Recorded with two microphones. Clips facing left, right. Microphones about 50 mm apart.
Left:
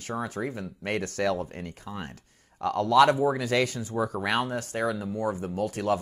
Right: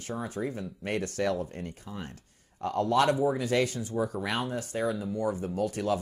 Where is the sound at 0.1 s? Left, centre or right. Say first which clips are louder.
Left 2 dB; left.